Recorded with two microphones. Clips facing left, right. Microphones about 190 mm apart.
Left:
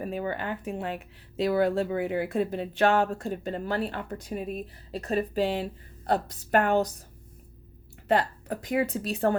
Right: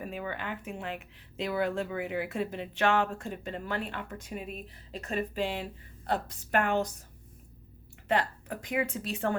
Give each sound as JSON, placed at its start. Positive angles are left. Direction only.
{"t": 0.0, "sound": "speech", "side_deg": 40}
{"t": 8.0, "sound": "speech", "side_deg": 35}